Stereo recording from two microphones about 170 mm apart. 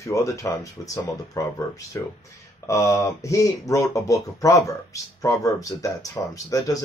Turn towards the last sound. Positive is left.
turn(degrees=20)  # may be behind; listen again after turning